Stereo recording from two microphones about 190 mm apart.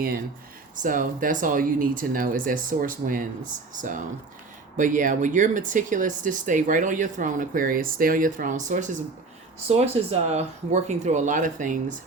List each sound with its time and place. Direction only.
0.8 s speech: 45° right (ahead or behind)